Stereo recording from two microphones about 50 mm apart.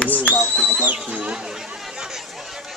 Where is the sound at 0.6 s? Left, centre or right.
Right.